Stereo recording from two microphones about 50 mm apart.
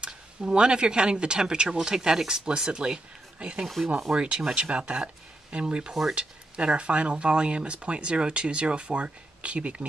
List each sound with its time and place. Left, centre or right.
0.0 s speech: centre
3.6 s speech: centre
4.1 s speech: centre
6.1 s speech: right